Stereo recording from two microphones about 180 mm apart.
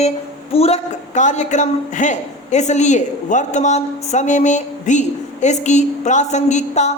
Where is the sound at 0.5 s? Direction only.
35° left (ahead or behind).